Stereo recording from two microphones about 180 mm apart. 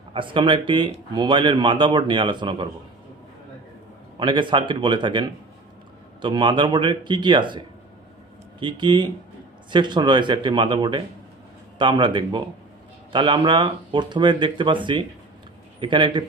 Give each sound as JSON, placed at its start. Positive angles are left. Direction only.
{"t": 0.1, "sound": "speech", "side_deg": -25}
{"t": 4.2, "sound": "speech", "side_deg": -25}
{"t": 8.6, "sound": "speech", "side_deg": -25}